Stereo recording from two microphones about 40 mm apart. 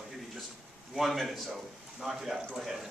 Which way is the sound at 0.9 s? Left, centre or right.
Centre.